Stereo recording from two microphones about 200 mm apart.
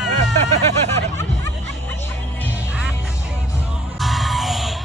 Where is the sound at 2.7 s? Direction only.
Centre (ahead or behind).